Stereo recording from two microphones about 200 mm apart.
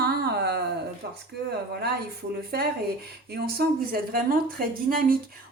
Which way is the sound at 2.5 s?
50° right (ahead or behind).